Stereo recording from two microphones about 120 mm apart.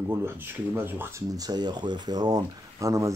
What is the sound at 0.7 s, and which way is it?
Speech, 15° right (ahead or behind).